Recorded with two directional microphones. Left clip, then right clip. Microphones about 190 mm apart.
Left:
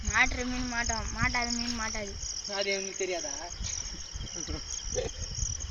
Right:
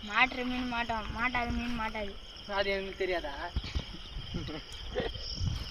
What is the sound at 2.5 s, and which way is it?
Cricket, 20° right (ahead or behind).